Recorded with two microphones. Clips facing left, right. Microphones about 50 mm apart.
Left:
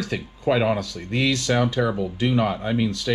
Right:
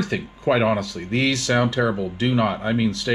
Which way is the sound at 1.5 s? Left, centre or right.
Right.